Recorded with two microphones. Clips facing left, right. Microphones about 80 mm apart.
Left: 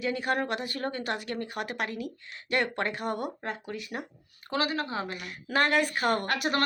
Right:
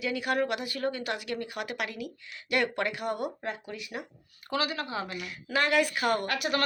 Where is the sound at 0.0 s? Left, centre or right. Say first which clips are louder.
Even; left.